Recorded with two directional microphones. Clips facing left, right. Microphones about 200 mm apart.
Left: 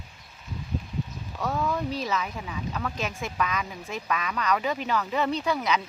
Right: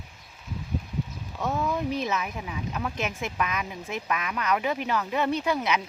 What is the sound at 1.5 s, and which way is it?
Speech, 5° right (ahead or behind).